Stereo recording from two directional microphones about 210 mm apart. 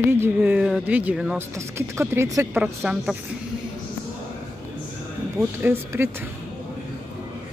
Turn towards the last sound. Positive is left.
turn(degrees=-10)  # may be behind; listen again after turning